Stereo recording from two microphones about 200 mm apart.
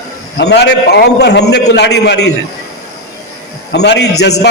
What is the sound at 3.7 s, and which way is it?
Speech, 55° left (ahead or behind).